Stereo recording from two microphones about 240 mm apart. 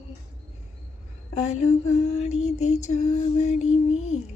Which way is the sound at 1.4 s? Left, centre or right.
Left.